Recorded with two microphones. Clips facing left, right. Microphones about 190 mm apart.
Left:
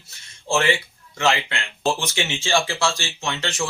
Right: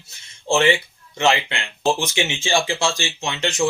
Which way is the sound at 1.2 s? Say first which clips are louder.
Right 2 dB; 20° right (ahead or behind).